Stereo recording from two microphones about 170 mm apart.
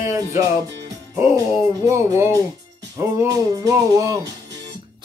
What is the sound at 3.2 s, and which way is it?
Music, 20° right (ahead or behind).